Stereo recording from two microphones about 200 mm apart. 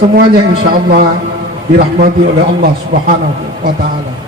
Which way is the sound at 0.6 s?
50° right (ahead or behind).